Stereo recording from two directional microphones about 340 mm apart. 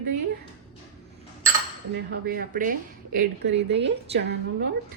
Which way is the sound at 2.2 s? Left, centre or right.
Right.